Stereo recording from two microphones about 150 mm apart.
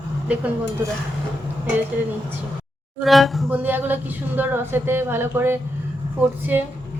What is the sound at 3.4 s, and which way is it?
Speech, 15° right (ahead or behind).